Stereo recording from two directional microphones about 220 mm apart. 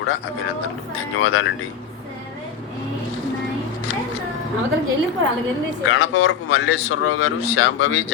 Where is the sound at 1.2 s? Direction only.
65° left (ahead or behind).